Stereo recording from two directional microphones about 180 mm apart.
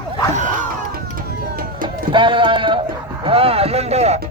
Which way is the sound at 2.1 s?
25° right (ahead or behind).